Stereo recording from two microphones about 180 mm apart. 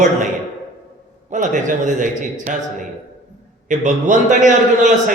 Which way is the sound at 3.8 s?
45° right (ahead or behind).